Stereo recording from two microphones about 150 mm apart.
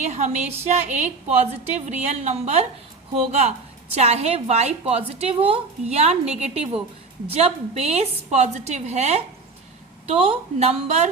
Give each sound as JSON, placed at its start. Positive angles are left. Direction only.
{"t": 0.0, "sound": "a woman's voice", "side_deg": -50}